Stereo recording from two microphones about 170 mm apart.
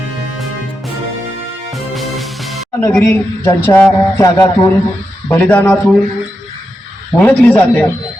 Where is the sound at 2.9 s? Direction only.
10° left (ahead or behind).